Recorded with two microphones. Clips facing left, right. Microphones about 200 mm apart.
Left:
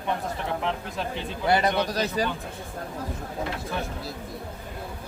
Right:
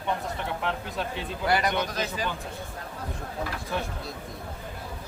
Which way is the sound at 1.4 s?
25° left (ahead or behind).